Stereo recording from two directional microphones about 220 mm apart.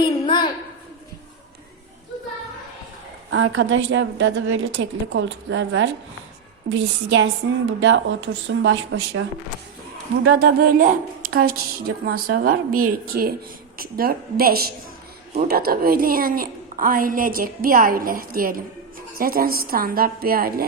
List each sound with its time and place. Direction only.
0.0 s a sound: 20° left (ahead or behind)
3.2 s a woman's voice: 60° right (ahead or behind)
10.2 s speech: 45° right (ahead or behind)
12.0 s a woman's voice: 45° right (ahead or behind)